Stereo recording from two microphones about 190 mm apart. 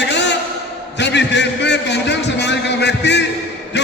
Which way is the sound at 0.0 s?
65° left (ahead or behind).